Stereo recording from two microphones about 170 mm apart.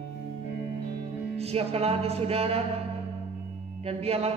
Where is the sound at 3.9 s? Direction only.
35° right (ahead or behind).